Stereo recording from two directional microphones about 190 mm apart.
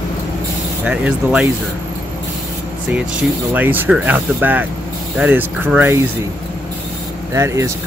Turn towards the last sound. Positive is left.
turn(degrees=-15)  # may be behind; listen again after turning